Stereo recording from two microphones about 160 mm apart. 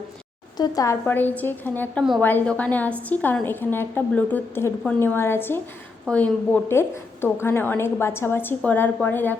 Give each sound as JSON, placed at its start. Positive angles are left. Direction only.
{"t": 0.5, "sound": "a woman's voice", "side_deg": 25}
{"t": 1.0, "sound": "a woman's voice", "side_deg": 10}